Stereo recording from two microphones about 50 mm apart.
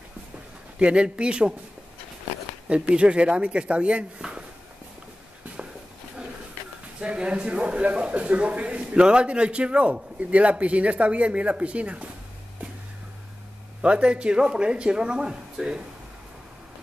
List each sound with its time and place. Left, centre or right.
0.7 s speech: right
2.7 s speech: right
7.0 s speech: centre
13.7 s speech: right